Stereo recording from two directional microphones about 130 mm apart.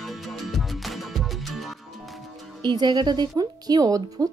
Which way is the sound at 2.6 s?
35° right (ahead or behind).